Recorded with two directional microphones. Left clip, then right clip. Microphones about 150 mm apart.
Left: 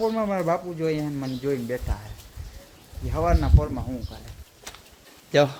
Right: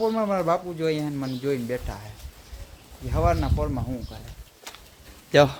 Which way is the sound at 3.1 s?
10° right (ahead or behind).